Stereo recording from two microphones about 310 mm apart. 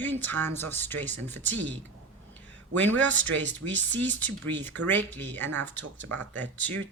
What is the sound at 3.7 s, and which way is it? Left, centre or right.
Speech, right.